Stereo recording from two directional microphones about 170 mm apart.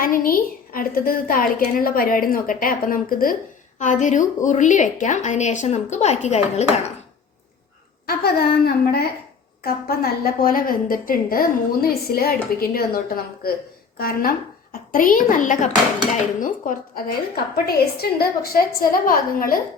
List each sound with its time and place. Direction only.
0.0 s a woman's voice: 55° left (ahead or behind); by 6.8 s 40° left (ahead or behind)
8.0 s a woman's voice: 65° left (ahead or behind)